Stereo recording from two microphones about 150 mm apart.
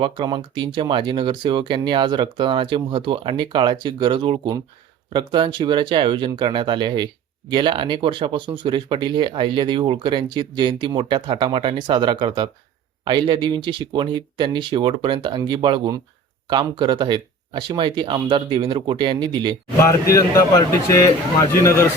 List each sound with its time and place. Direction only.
0.0 s speech: 30° right (ahead or behind)
20.1 s a man's voice: 20° left (ahead or behind)